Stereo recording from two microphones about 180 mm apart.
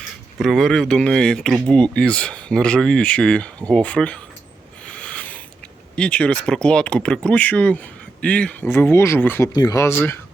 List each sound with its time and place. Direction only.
0.3 s speech: centre (ahead or behind)
4.9 s a sound: 5° left (ahead or behind)
6.0 s speech: 5° left (ahead or behind)